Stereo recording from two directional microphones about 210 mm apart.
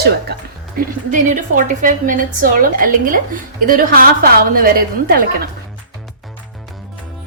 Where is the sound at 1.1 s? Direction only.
40° right (ahead or behind).